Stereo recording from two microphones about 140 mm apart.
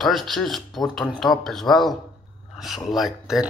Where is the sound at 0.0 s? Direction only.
Centre (ahead or behind).